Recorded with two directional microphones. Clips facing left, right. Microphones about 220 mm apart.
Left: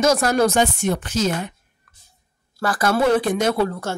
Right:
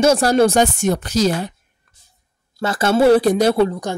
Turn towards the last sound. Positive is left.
turn(degrees=-15)  # may be behind; listen again after turning